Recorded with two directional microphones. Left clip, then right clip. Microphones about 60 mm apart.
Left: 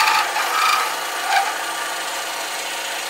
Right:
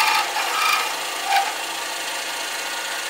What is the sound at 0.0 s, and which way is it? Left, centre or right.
Filing, right.